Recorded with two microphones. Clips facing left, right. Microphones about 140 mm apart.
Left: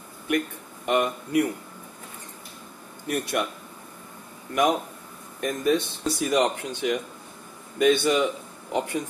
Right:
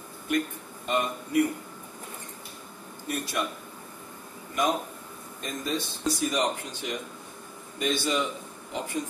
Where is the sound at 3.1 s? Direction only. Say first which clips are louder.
Left 4 dB; 65° left (ahead or behind).